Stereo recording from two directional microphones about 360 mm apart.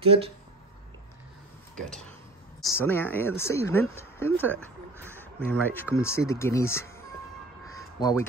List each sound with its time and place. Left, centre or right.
0.0 s speech: centre
2.6 s speech: centre
4.9 s a sound: centre
5.2 s speech: centre
7.7 s crow: centre